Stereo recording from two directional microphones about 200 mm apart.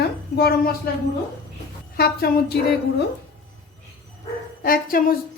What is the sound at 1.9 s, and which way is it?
A woman's voice, 50° left (ahead or behind).